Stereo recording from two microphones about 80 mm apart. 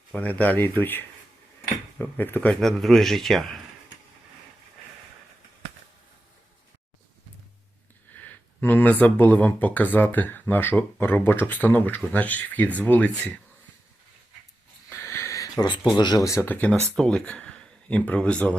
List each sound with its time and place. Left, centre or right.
0.2 s speech: centre
2.5 s a man's voice: centre
8.2 s speech: left
14.8 s a sound: left
15.6 s speech: left
16.4 s speech: left
16.9 s speech: centre